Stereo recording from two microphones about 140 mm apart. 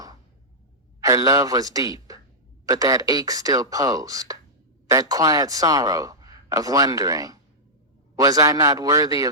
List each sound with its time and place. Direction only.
1.0 s a man's voice: 25° right (ahead or behind)